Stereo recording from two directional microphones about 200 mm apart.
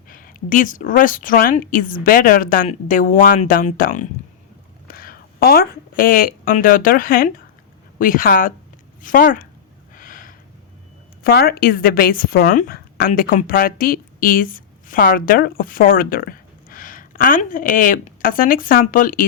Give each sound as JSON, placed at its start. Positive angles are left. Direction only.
{"t": 0.1, "sound": "a woman's voice", "side_deg": 45}
{"t": 9.9, "sound": "gasp", "side_deg": 45}
{"t": 11.2, "sound": "speech", "side_deg": 50}